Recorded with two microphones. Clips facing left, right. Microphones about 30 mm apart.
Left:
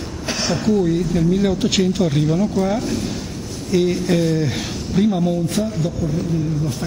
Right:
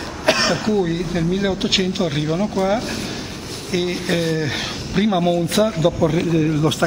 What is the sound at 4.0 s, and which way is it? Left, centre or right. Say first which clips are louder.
Speech: left 2 dB; right.